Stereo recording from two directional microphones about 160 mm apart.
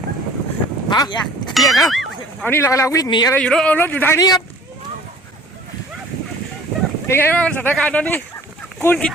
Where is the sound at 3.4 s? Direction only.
5° left (ahead or behind); by 4.4 s 20° left (ahead or behind).